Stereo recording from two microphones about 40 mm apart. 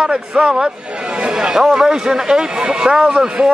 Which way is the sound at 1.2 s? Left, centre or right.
Right.